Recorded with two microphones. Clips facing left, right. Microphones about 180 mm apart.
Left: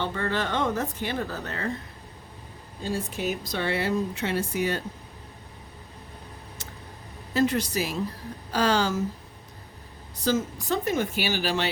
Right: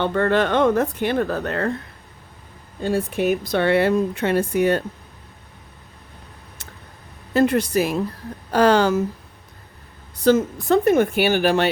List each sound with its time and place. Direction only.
0.0 s speech: 60° right (ahead or behind)
2.8 s speech: 60° right (ahead or behind)
7.3 s speech: 55° right (ahead or behind)
10.2 s speech: 60° right (ahead or behind)